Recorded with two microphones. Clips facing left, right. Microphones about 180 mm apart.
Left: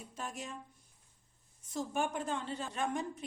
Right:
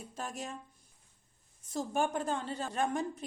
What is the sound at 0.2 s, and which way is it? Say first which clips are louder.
Speech: right 2 dB; 35° right (ahead or behind).